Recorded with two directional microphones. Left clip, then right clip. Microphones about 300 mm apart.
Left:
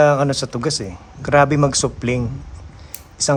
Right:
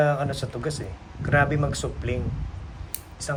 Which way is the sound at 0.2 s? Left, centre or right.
Left.